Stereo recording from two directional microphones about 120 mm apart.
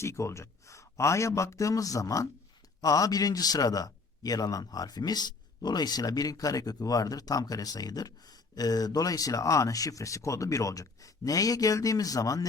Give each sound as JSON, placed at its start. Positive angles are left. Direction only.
{"t": 0.0, "sound": "a man's voice", "side_deg": 25}